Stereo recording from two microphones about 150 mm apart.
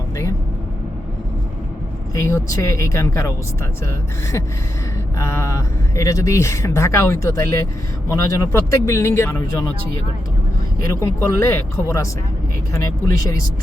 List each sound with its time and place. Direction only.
2.1 s speech: 20° left (ahead or behind)
10.8 s speech: 20° left (ahead or behind)